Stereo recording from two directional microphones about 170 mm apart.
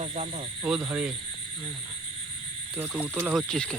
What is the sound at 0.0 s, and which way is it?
Speech, 40° right (ahead or behind).